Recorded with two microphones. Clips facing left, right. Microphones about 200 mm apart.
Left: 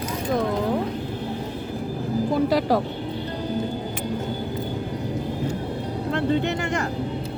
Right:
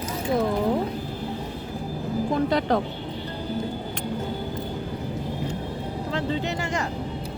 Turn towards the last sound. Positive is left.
turn(degrees=60)  # may be behind; listen again after turning